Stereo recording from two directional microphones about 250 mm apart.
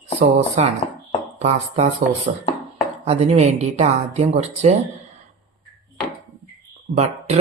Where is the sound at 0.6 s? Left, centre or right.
Right.